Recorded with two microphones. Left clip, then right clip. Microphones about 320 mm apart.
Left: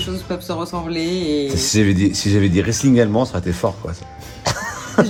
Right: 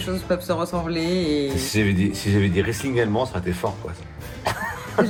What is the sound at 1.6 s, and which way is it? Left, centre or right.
Speech, left.